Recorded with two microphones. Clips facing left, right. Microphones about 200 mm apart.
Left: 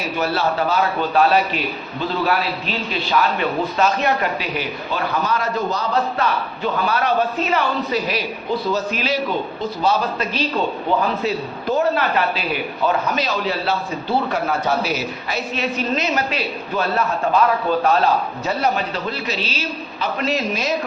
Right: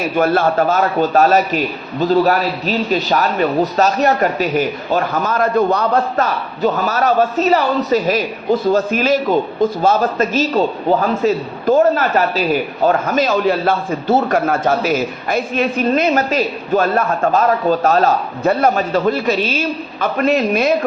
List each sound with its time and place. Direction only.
0.2 s a man's voice: 50° right (ahead or behind)